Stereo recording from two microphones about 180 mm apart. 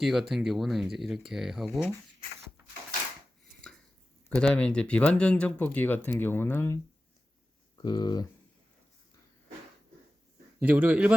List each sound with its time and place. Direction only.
0.0 s speech: centre (ahead or behind)
4.4 s speech: 5° left (ahead or behind)
7.8 s speech: 20° left (ahead or behind)
10.6 s a man's voice: 10° right (ahead or behind)